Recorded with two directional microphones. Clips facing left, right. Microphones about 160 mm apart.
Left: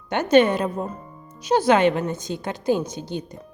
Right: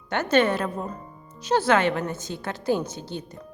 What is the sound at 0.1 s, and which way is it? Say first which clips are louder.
Speech: left 4 dB; 15° left (ahead or behind).